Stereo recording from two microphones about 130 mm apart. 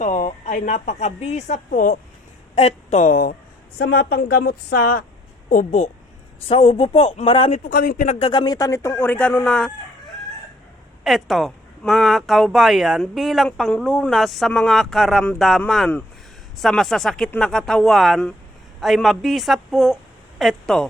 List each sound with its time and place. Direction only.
0.0 s a woman's voice: 75° left (ahead or behind)
2.6 s a woman's voice: 55° left (ahead or behind); by 3.3 s 90° left
5.5 s a woman's voice: 75° left (ahead or behind)
6.5 s speech: 50° left (ahead or behind)
7.5 s a man's voice: 90° left
8.2 s speech: 35° left (ahead or behind); by 9.7 s 5° left (ahead or behind)
11.0 s speech: centre (ahead or behind)